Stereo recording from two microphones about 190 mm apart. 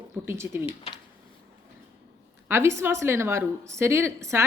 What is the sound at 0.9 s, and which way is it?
Speech, 30° left (ahead or behind).